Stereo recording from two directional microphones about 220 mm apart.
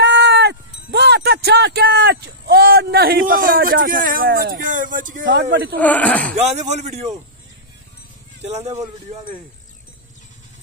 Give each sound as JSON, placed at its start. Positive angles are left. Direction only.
{"t": 0.0, "sound": "sheep", "side_deg": -50}
{"t": 0.9, "sound": "speech", "side_deg": -45}
{"t": 5.8, "sound": "speech", "side_deg": 5}
{"t": 6.3, "sound": "speech", "side_deg": -30}
{"t": 8.5, "sound": "speech", "side_deg": -30}